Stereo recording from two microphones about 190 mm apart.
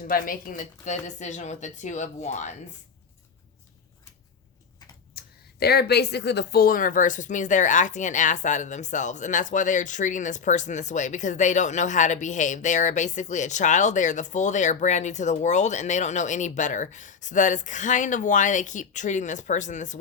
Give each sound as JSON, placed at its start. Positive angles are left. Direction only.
{"t": 0.1, "sound": "speech", "side_deg": 50}
{"t": 5.1, "sound": "speech", "side_deg": 55}